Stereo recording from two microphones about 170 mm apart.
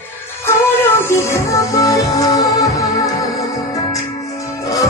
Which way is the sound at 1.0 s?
15° left (ahead or behind).